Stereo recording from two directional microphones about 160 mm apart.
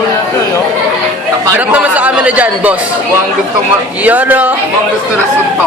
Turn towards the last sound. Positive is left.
turn(degrees=-10)  # may be behind; listen again after turning